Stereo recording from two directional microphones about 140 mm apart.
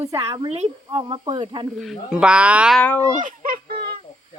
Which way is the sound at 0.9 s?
35° right (ahead or behind).